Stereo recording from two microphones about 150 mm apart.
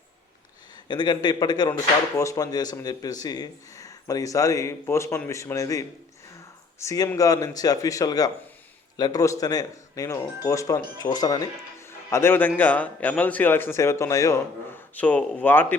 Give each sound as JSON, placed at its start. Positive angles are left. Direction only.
{"t": 0.9, "sound": "a man's voice", "side_deg": 30}